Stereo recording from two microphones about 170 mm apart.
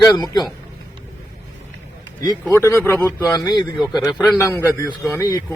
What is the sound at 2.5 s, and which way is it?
A man's voice, 15° left (ahead or behind).